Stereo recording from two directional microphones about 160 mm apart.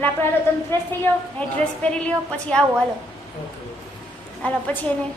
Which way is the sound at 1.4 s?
5° left (ahead or behind).